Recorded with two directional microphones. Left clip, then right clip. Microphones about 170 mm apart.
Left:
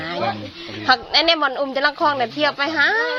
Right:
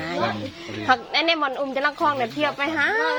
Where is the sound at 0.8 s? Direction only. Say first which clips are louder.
Left 4 dB; 5° left (ahead or behind).